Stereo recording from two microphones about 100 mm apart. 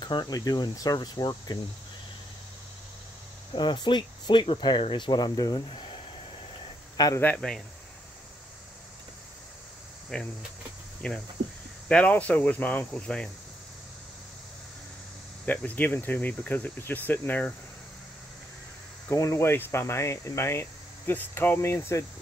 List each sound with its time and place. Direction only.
0.0 s speech: 45° left (ahead or behind)
3.5 s speech: 50° left (ahead or behind)
5.7 s speech: 55° left (ahead or behind)
7.0 s a man's voice: 40° left (ahead or behind)
7.3 s speech: 5° left (ahead or behind)
10.1 s speech: 10° left (ahead or behind)
15.4 s speech: 15° left (ahead or behind)
19.0 s speech: 30° left (ahead or behind)